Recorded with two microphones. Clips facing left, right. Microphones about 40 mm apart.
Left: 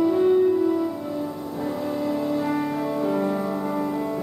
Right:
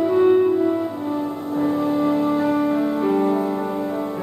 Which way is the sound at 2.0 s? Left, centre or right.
Right.